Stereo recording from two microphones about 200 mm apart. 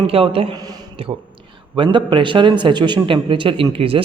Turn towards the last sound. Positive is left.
turn(degrees=-25)  # may be behind; listen again after turning